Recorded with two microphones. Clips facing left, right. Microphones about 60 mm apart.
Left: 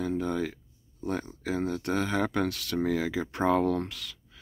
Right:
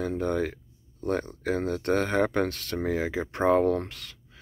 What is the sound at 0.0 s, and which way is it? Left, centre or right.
Speech, right.